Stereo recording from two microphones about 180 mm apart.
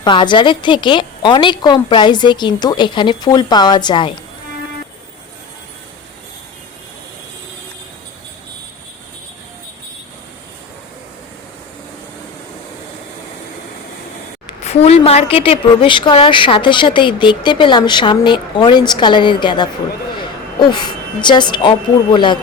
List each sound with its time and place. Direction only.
0.0 s a woman's voice: 25° left (ahead or behind)
14.6 s a woman's voice: 35° left (ahead or behind)